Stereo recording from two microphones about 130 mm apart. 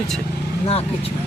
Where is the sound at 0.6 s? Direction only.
50° left (ahead or behind).